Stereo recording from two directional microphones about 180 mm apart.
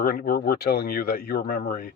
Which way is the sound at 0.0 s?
55° left (ahead or behind).